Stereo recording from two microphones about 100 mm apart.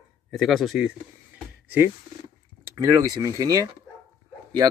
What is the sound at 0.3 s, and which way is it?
Speech, centre (ahead or behind).